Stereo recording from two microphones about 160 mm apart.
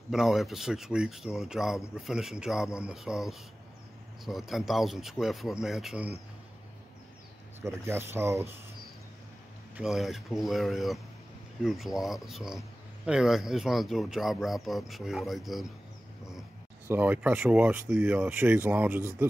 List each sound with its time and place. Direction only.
0.1 s speech: centre (ahead or behind)
7.6 s speech: 15° right (ahead or behind)
9.8 s speech: centre (ahead or behind)
16.3 s dog: 5° right (ahead or behind)
16.9 s speech: 10° right (ahead or behind)